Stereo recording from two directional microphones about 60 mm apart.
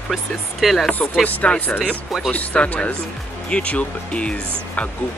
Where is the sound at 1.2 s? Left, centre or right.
Left.